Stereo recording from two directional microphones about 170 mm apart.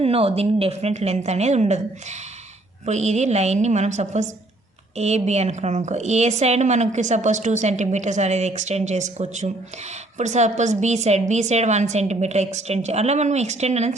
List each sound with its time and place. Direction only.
0.0 s a woman's voice: 35° right (ahead or behind)